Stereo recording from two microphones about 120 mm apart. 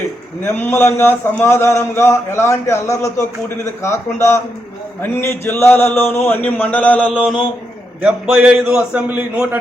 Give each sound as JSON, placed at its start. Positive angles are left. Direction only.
{"t": 0.4, "sound": "a man's voice", "side_deg": 20}
{"t": 8.0, "sound": "a man's voice", "side_deg": -10}